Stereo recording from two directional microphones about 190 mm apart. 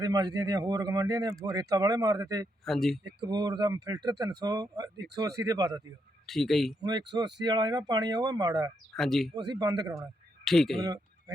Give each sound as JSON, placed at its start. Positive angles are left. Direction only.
{"t": 0.0, "sound": "speech", "side_deg": -20}
{"t": 2.6, "sound": "speech", "side_deg": 0}
{"t": 3.0, "sound": "speech", "side_deg": -20}
{"t": 6.2, "sound": "speech", "side_deg": 0}
{"t": 6.8, "sound": "speech", "side_deg": -20}
{"t": 8.9, "sound": "speech", "side_deg": 0}
{"t": 9.3, "sound": "speech", "side_deg": -20}
{"t": 10.4, "sound": "speech", "side_deg": 0}